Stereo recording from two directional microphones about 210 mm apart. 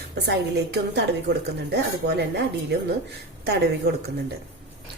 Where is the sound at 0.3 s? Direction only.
55° right (ahead or behind).